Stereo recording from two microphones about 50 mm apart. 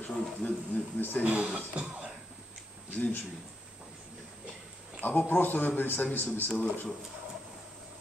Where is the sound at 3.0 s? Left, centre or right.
Left.